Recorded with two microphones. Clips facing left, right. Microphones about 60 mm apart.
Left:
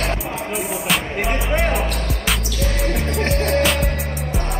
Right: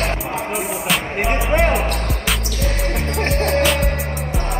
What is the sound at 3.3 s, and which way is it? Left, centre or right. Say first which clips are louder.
Music: right 1 dB; centre.